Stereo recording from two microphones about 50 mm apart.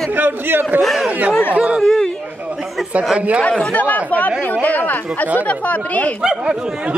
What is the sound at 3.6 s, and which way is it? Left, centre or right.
Speech, left.